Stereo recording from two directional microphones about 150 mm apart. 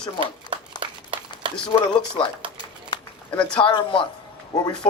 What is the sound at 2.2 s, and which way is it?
Speech, 35° left (ahead or behind).